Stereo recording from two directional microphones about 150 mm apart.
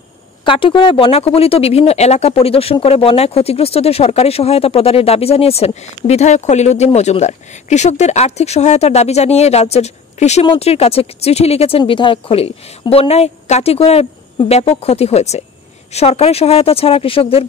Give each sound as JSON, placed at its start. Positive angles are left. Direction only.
{"t": 0.5, "sound": "speech", "side_deg": 35}